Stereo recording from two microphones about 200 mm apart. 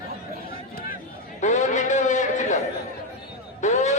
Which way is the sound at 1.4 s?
35° left (ahead or behind).